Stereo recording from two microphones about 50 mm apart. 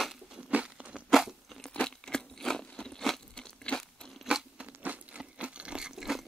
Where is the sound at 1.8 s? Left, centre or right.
Centre.